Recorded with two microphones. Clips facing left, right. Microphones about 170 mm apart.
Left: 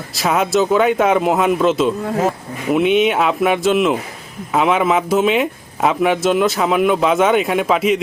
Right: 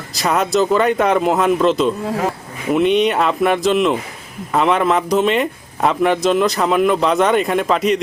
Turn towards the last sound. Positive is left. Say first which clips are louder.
# even
turn(degrees=5)  # may be behind; listen again after turning